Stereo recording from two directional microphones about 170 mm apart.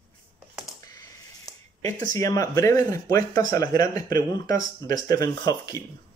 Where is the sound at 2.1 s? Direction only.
20° left (ahead or behind).